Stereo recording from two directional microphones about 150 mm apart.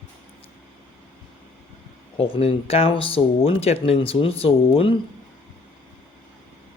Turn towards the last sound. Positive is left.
turn(degrees=40)  # may be behind; listen again after turning